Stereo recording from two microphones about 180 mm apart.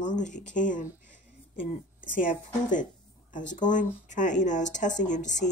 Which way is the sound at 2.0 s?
50° left (ahead or behind).